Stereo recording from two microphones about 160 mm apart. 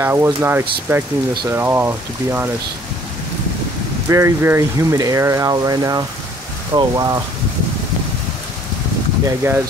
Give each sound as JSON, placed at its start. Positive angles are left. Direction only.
{"t": 0.0, "sound": "speech", "side_deg": -15}
{"t": 4.1, "sound": "speech", "side_deg": -15}
{"t": 9.2, "sound": "speech", "side_deg": -15}